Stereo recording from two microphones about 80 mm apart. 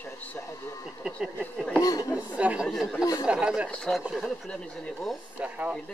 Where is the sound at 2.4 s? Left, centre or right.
Centre.